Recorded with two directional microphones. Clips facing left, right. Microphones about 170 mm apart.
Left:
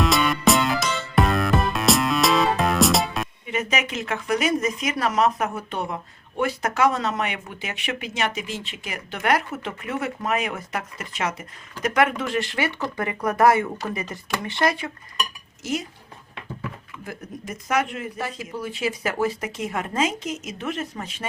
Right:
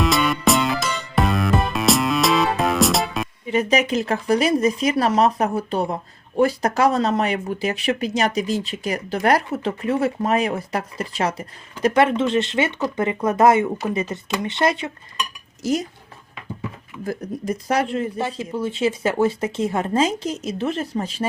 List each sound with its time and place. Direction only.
0.0 s music: centre (ahead or behind)
3.4 s speech: 30° right (ahead or behind)
15.6 s speech: 40° right (ahead or behind)
17.1 s speech: 35° right (ahead or behind)